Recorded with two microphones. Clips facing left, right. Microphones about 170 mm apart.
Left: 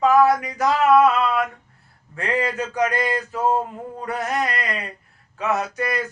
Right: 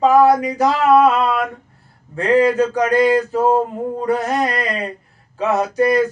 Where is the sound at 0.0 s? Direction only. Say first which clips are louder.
Right 4 dB; 30° right (ahead or behind).